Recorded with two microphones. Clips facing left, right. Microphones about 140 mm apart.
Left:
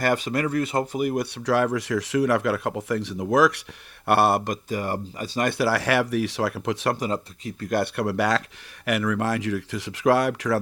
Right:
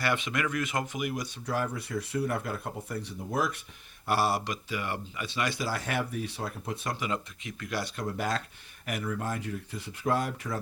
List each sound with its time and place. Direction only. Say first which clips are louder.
0.0 s speech: left 7 dB; 40° left (ahead or behind)
1.1 s speech: left 10 dB; 75° left (ahead or behind)
4.0 s speech: left 8 dB; 60° left (ahead or behind); by 5.5 s 40° left (ahead or behind)
5.5 s speech: left 10 dB; 70° left (ahead or behind); by 6.9 s 85° left
6.9 s speech: left 6 dB; 35° left (ahead or behind)
7.7 s speech: left 10 dB; 65° left (ahead or behind)